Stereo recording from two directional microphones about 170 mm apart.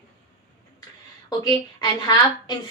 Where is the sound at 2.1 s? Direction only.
25° left (ahead or behind).